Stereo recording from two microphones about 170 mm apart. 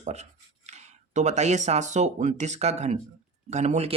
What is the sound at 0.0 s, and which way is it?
Speech, 40° right (ahead or behind).